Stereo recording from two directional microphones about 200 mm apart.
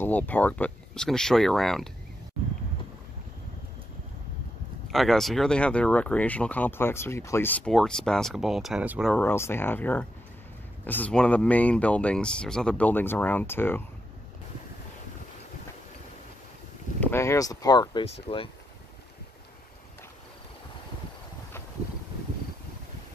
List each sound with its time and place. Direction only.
0.0 s speech: 10° left (ahead or behind)
4.9 s speech: centre (ahead or behind)
9.1 s speech: 10° left (ahead or behind)
17.0 s speech: 15° left (ahead or behind); by 18.5 s 30° left (ahead or behind)